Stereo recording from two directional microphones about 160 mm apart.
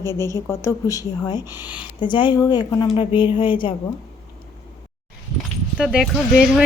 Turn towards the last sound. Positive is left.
turn(degrees=-5)  # may be behind; listen again after turning